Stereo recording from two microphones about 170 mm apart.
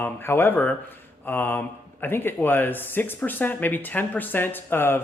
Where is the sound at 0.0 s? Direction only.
15° left (ahead or behind).